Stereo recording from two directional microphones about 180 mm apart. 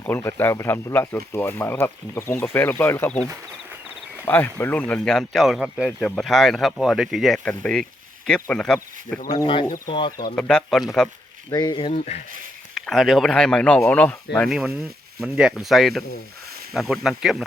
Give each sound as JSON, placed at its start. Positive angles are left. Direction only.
{"t": 0.0, "sound": "speech", "side_deg": 15}
{"t": 4.3, "sound": "speech", "side_deg": 10}
{"t": 9.3, "sound": "speech", "side_deg": 25}
{"t": 10.1, "sound": "speech", "side_deg": 50}
{"t": 10.3, "sound": "speech", "side_deg": 5}
{"t": 11.5, "sound": "speech", "side_deg": 25}
{"t": 12.8, "sound": "speech", "side_deg": 0}